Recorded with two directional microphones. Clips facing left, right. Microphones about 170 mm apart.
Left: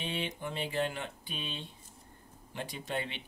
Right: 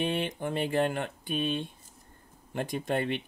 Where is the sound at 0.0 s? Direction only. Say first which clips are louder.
Right 7 dB; 55° right (ahead or behind).